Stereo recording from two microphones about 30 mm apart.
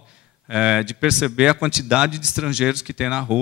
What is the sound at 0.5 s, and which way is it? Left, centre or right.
A man's voice, right.